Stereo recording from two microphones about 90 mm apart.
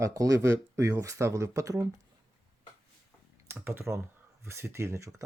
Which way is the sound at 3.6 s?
30° right (ahead or behind).